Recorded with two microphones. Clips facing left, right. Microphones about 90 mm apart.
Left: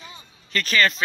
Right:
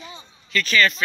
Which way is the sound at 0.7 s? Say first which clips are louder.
Right 1 dB; 30° left (ahead or behind).